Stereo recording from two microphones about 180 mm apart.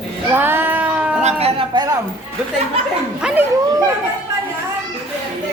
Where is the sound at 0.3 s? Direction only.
10° right (ahead or behind).